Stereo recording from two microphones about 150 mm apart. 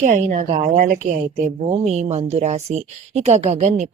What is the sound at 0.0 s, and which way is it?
A woman's voice, 55° right (ahead or behind).